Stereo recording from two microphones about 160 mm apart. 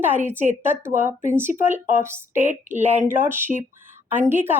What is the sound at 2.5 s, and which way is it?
Speech, 50° right (ahead or behind).